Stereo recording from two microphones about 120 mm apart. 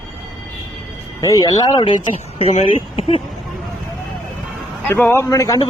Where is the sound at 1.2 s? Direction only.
30° left (ahead or behind).